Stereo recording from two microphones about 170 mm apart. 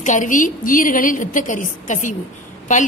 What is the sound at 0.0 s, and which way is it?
A woman's voice, 50° left (ahead or behind).